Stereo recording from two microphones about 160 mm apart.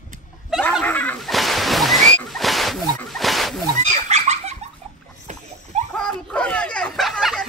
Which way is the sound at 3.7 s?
45° right (ahead or behind).